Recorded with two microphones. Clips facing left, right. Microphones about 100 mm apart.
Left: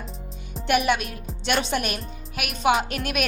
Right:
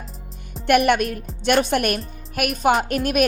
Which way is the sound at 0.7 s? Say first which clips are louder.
Right 5 dB; 55° right (ahead or behind).